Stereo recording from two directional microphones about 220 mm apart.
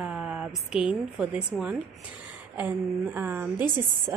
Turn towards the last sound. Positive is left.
turn(degrees=-10)  # may be behind; listen again after turning